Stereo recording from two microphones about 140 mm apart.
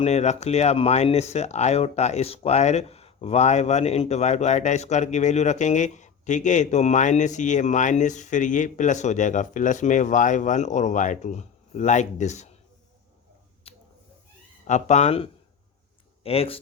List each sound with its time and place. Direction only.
0.0 s speech: 55° left (ahead or behind)
13.7 s a sound: 45° left (ahead or behind)
14.7 s speech: 55° left (ahead or behind)